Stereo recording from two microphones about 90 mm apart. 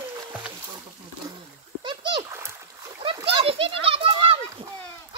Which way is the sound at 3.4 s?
90° right.